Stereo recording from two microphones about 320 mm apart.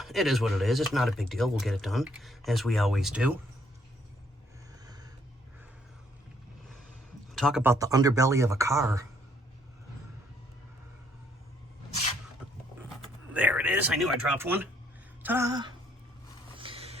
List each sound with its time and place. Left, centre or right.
0.0 s speech: centre
7.3 s speech: centre
12.4 s a sound: centre
15.2 s speech: centre
16.6 s vehicle: centre